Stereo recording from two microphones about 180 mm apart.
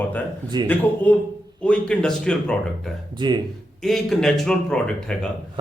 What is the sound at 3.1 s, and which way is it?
Speech, 25° right (ahead or behind).